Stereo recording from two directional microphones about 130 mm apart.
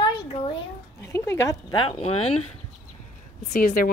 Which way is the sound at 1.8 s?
45° left (ahead or behind).